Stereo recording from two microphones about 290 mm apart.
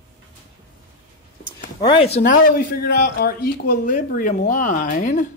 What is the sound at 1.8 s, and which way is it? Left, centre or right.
Speech, centre.